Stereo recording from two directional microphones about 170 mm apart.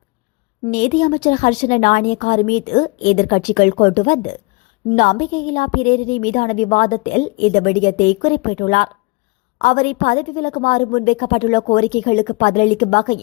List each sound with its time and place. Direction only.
0.7 s a woman's voice: 50° left (ahead or behind)